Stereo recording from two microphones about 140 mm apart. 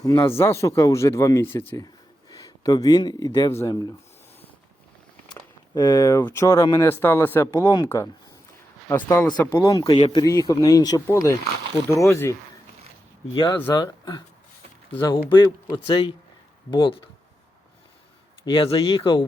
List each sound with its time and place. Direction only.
0.0 s speech: 20° left (ahead or behind)
2.3 s speech: 25° left (ahead or behind)
5.7 s speech: 25° left (ahead or behind)
7.6 s speech: 35° left (ahead or behind)
7.9 s speech: 20° left (ahead or behind)
9.9 s speech: 35° left (ahead or behind); by 12.4 s 20° left (ahead or behind)
13.3 s speech: 35° left (ahead or behind)
18.4 s speech: 40° left (ahead or behind)